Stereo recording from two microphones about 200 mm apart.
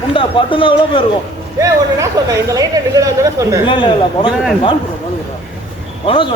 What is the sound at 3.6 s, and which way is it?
Speech, 25° left (ahead or behind).